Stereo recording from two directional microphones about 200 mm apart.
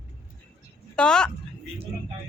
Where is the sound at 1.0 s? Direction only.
5° left (ahead or behind).